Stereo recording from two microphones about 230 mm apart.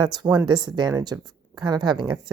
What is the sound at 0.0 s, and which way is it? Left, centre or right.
Speech, centre.